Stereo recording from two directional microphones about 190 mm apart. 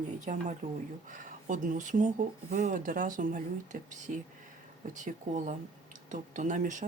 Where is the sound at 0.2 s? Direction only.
40° right (ahead or behind).